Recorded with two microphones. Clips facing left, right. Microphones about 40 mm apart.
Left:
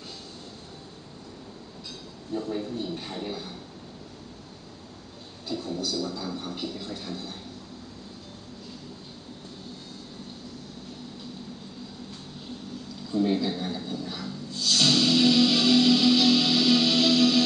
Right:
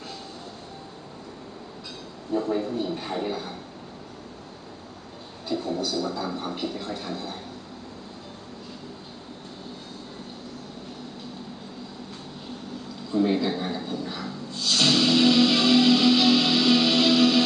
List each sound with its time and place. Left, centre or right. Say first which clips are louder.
2.3 s speech: right 5 dB; centre
5.5 s speech: right 4 dB; centre
13.1 s a sound: right 2 dB; centre